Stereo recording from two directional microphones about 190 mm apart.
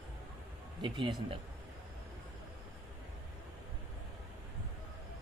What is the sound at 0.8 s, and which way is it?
Speech, 25° right (ahead or behind).